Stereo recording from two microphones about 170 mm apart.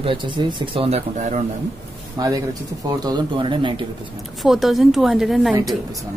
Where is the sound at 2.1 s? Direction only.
20° right (ahead or behind).